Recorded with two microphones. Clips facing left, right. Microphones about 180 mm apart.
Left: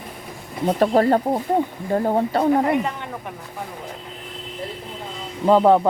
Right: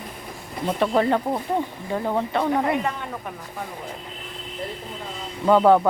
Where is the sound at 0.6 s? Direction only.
40° left (ahead or behind).